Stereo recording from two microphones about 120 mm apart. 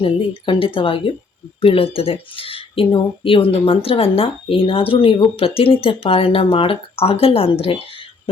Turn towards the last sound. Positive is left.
turn(degrees=55)  # may be behind; listen again after turning